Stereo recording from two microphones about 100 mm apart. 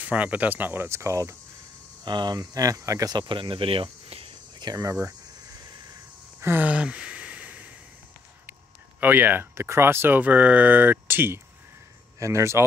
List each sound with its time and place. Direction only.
0.0 s speech: 15° right (ahead or behind); by 1.3 s 30° right (ahead or behind)
2.0 s speech: 45° right (ahead or behind)
3.2 s speech: 55° right (ahead or behind)
4.6 s cricket: 45° right (ahead or behind)
4.8 s speech: 25° right (ahead or behind)
6.4 s a sound: 20° right (ahead or behind)
9.0 s speech: 20° right (ahead or behind)